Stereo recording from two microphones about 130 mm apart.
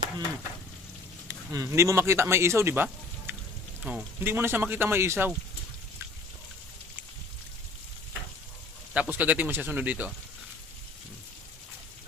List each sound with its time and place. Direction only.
1.2 s a man's voice: 25° right (ahead or behind)
8.9 s speech: 10° right (ahead or behind)